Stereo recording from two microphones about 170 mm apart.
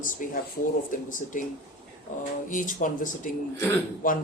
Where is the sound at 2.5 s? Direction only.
50° left (ahead or behind).